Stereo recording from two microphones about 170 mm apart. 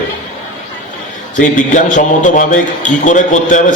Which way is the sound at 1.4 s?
50° left (ahead or behind).